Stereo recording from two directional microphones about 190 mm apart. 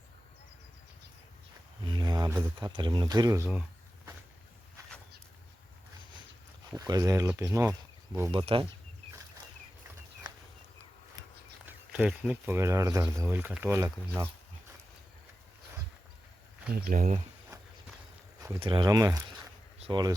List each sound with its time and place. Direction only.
1.9 s speech: 20° right (ahead or behind)
6.7 s speech: 20° right (ahead or behind)
8.3 s speech: 25° right (ahead or behind)
11.6 s speech: 5° right (ahead or behind)
16.9 s speech: 45° right (ahead or behind)
18.4 s speech: 25° right (ahead or behind)